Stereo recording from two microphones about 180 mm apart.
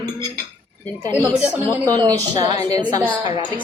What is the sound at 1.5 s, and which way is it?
A woman's voice, 20° right (ahead or behind).